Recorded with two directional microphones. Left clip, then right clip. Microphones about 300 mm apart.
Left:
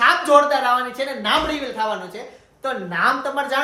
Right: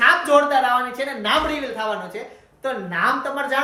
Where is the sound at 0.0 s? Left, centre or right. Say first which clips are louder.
Left 1 dB; centre.